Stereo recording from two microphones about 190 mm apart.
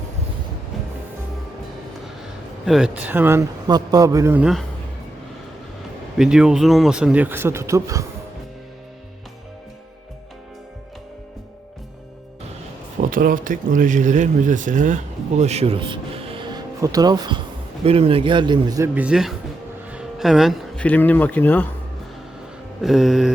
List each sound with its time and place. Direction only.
2.6 s speech: 5° right (ahead or behind)
6.1 s speech: 5° right (ahead or behind)
13.0 s a man's voice: 45° right (ahead or behind); by 18.9 s 20° right (ahead or behind)
18.9 s speech: 5° right (ahead or behind)
22.8 s speech: centre (ahead or behind)